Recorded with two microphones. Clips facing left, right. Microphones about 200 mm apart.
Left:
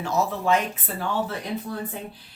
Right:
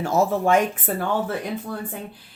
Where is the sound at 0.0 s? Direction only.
45° right (ahead or behind).